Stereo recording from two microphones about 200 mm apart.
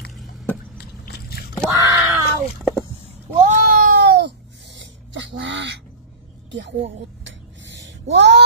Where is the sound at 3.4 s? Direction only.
45° right (ahead or behind).